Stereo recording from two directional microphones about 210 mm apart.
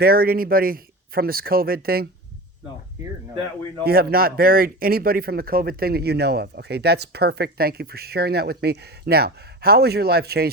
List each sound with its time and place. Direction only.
0.0 s speech: 45° right (ahead or behind)
3.8 s speech: 45° right (ahead or behind)